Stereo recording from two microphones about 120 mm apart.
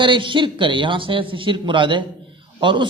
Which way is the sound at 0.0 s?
45° right (ahead or behind).